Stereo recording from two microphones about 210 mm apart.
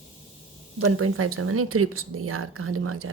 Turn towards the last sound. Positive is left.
turn(degrees=-90)